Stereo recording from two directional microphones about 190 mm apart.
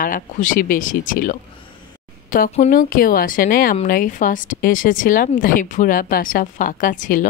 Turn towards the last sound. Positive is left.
turn(degrees=45)  # may be behind; listen again after turning